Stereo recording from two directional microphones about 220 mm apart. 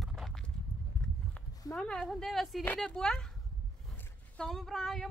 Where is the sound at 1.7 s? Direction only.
Centre (ahead or behind).